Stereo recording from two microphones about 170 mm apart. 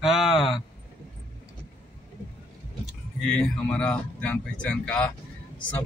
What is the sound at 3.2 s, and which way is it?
Speech, 5° left (ahead or behind).